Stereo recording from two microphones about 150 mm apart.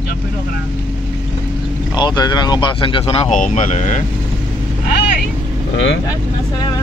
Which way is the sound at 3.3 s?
60° left (ahead or behind).